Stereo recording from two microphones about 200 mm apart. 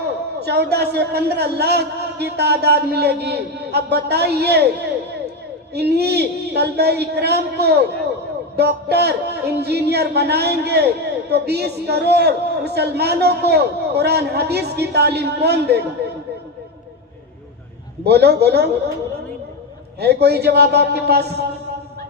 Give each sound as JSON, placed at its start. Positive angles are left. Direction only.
{"t": 0.3, "sound": "a man's voice", "side_deg": -55}
{"t": 5.7, "sound": "a man's voice", "side_deg": -55}
{"t": 16.0, "sound": "a sound", "side_deg": -55}
{"t": 18.0, "sound": "a man's voice", "side_deg": -55}
{"t": 20.0, "sound": "a man's voice", "side_deg": -55}